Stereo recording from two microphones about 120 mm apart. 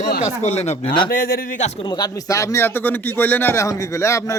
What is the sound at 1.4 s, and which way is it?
Speech, 85° left.